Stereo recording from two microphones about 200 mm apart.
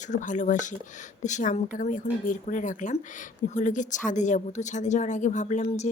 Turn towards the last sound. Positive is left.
turn(degrees=35)  # may be behind; listen again after turning